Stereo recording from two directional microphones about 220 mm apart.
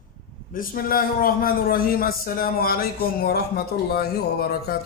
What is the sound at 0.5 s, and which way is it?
Speech, 40° left (ahead or behind).